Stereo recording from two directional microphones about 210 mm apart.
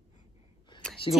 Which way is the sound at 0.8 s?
5° left (ahead or behind).